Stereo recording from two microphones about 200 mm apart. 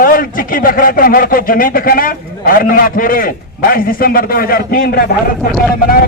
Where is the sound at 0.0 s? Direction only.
45° left (ahead or behind).